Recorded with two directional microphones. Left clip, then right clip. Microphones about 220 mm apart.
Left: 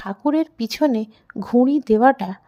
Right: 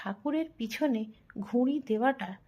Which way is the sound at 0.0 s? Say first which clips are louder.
Left 12 dB; 45° left (ahead or behind).